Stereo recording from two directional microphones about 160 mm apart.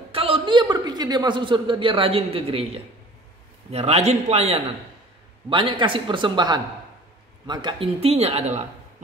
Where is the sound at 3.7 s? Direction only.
40° right (ahead or behind).